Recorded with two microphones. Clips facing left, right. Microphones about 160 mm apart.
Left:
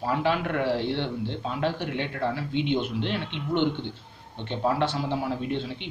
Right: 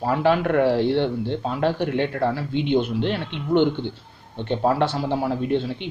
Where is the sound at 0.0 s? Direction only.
45° right (ahead or behind).